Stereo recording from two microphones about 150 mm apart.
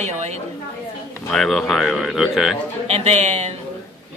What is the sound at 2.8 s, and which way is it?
Speech, 45° right (ahead or behind).